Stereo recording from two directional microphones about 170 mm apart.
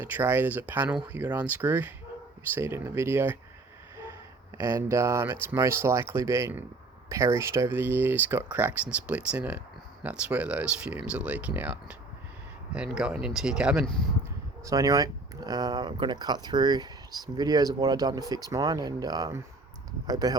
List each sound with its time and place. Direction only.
0.0 s speech: 10° right (ahead or behind)
4.5 s speech: 15° right (ahead or behind)
14.6 s speech: 20° right (ahead or behind)